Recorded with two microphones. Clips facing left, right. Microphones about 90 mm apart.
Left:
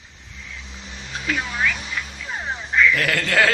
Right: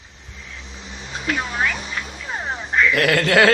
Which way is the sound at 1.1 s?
25° right (ahead or behind).